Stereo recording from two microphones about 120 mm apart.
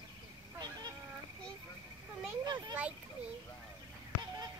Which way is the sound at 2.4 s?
35° right (ahead or behind).